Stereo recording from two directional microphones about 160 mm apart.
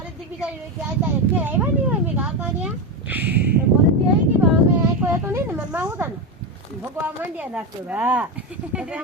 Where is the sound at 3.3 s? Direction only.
90° right.